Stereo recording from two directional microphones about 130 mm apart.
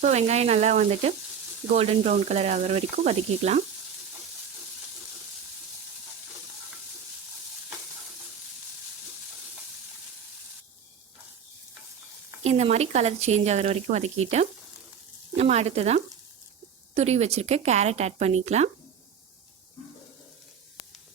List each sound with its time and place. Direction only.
0.0 s speech: 55° right (ahead or behind)
12.4 s speech: 55° right (ahead or behind)